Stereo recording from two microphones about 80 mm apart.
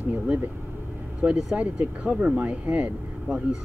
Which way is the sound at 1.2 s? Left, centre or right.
Centre.